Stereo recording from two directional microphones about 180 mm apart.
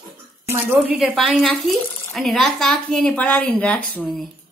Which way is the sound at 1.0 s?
Centre (ahead or behind).